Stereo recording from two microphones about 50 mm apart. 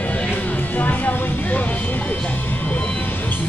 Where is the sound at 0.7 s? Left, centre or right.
Left.